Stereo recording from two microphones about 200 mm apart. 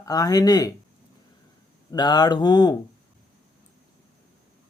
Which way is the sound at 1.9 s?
20° left (ahead or behind).